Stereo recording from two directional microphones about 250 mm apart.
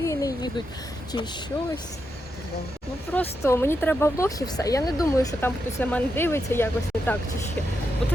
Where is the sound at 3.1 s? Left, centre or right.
Centre.